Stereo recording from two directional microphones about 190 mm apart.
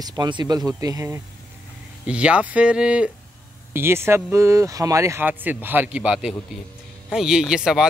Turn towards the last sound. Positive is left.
turn(degrees=-5)  # may be behind; listen again after turning